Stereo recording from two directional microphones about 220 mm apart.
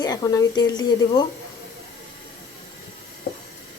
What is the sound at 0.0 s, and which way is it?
Speech, 15° left (ahead or behind).